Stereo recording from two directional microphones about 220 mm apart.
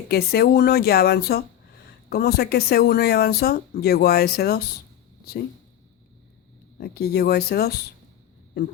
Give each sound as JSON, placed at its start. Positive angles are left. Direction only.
{"t": 0.1, "sound": "speech", "side_deg": 45}
{"t": 6.7, "sound": "speech", "side_deg": 45}